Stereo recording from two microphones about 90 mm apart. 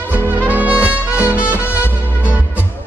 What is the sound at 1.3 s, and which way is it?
Music, 20° left (ahead or behind).